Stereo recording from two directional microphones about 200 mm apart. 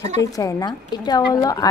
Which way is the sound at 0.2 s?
15° left (ahead or behind).